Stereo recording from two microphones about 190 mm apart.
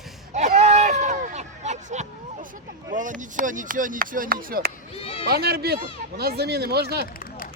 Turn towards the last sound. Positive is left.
turn(degrees=-55)  # may be behind; listen again after turning